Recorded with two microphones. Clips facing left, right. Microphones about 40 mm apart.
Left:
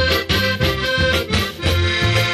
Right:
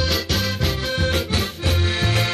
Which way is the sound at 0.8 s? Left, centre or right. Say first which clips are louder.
Left 5 dB; left.